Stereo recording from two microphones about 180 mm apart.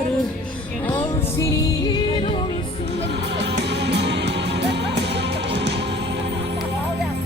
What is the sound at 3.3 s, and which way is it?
Music, 70° right (ahead or behind).